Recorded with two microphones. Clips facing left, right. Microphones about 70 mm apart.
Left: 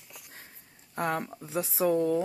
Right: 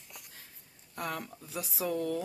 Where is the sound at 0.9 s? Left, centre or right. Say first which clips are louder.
Left 7 dB; left.